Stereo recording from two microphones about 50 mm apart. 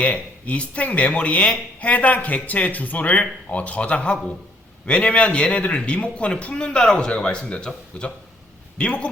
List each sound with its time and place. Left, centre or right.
0.0 s speech: left
8.8 s speech: left